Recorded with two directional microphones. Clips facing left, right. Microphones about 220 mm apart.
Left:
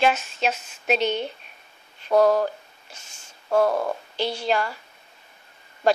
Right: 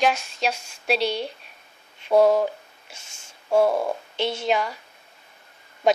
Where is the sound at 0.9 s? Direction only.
10° right (ahead or behind).